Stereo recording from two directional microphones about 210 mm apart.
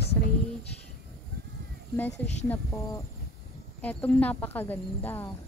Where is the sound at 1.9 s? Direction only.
10° left (ahead or behind).